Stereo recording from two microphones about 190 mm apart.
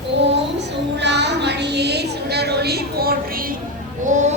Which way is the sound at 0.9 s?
65° right (ahead or behind).